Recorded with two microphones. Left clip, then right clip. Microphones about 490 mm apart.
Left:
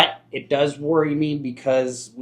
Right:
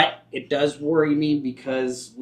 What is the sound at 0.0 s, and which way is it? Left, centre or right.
Speech, left.